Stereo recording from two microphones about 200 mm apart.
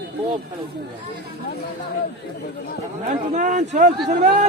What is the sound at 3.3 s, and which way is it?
Speech, 40° right (ahead or behind).